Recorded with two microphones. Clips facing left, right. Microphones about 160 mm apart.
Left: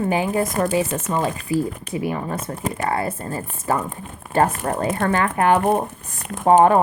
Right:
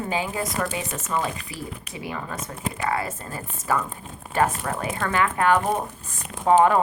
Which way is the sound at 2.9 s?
30° left (ahead or behind).